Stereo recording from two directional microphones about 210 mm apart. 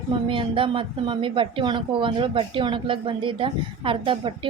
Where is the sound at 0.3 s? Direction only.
25° right (ahead or behind).